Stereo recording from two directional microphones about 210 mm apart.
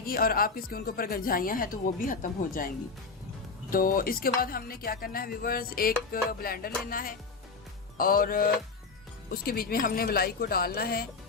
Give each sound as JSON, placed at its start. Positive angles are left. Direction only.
{"t": 0.0, "sound": "speech", "side_deg": 45}
{"t": 3.7, "sound": "speech", "side_deg": 40}